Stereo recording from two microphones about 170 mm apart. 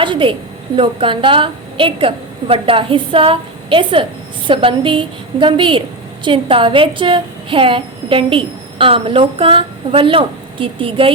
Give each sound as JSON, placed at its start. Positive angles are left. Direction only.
{"t": 0.0, "sound": "a woman's voice", "side_deg": -30}